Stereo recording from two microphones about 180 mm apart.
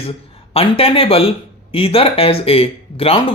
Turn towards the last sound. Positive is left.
turn(degrees=30)  # may be behind; listen again after turning